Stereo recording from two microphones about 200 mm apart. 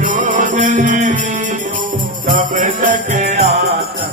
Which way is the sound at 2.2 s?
40° right (ahead or behind).